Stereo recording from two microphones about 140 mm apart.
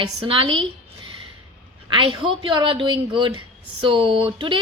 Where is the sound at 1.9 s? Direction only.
35° right (ahead or behind).